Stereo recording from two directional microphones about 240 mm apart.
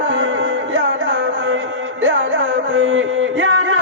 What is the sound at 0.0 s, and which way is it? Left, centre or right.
Music, right.